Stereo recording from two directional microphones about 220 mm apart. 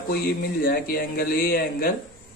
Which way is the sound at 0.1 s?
45° left (ahead or behind).